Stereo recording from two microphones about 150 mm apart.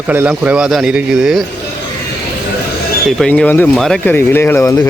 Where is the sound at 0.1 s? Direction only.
10° right (ahead or behind).